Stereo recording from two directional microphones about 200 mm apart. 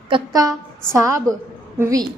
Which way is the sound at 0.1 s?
15° right (ahead or behind).